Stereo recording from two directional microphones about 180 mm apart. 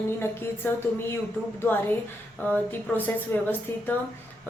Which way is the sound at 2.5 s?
10° left (ahead or behind).